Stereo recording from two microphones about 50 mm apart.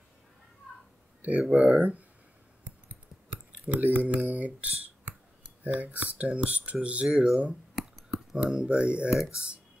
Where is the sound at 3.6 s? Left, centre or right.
Right.